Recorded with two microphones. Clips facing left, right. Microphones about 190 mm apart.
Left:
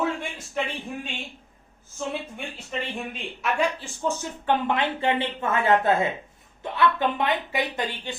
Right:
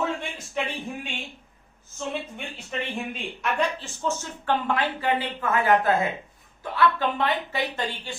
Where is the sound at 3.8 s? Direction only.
15° left (ahead or behind).